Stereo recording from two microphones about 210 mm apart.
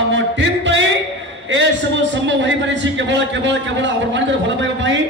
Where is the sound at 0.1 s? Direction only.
60° right (ahead or behind).